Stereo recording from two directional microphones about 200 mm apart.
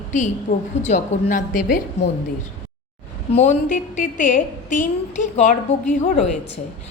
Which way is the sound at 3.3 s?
40° left (ahead or behind).